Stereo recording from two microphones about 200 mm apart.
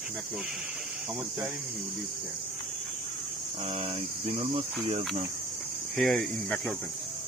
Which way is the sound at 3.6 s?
30° right (ahead or behind).